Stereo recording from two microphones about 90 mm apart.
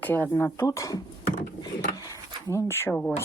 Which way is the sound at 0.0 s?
20° left (ahead or behind).